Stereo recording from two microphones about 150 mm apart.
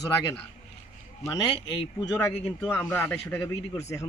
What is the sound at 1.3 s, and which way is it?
Speech, 30° left (ahead or behind).